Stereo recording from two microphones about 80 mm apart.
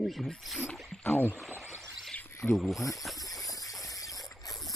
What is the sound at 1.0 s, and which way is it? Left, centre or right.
Speech, left.